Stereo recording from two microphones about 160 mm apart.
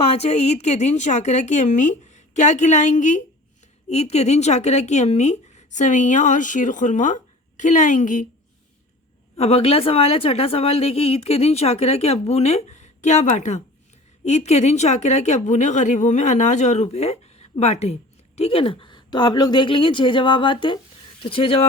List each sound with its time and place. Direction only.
0.0 s speech: 40° left (ahead or behind)
9.4 s speech: 40° left (ahead or behind)